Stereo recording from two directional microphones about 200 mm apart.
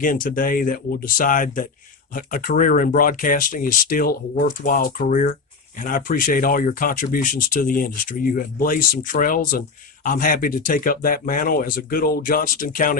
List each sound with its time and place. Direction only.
0.0 s speech: 45° left (ahead or behind)